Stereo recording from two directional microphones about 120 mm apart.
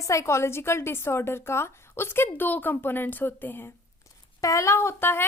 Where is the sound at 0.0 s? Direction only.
25° left (ahead or behind).